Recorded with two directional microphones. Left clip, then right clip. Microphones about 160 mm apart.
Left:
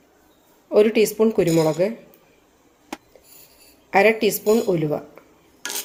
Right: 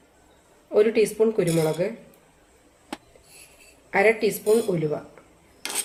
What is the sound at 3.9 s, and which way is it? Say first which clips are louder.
Speech: left 3 dB; 55° left (ahead or behind).